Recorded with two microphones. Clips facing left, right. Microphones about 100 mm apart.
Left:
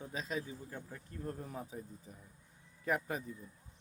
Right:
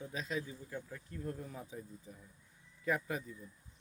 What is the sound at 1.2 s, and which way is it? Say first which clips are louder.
Speech: left 1 dB; 40° left (ahead or behind).